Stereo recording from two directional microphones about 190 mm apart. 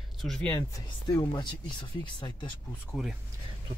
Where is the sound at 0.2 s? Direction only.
5° left (ahead or behind); by 2.3 s 25° left (ahead or behind).